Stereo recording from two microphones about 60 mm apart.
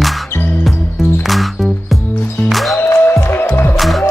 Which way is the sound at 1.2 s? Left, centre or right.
Centre.